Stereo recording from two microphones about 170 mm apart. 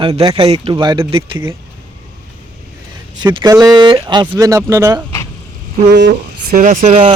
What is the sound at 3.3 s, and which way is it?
Speech, 20° right (ahead or behind).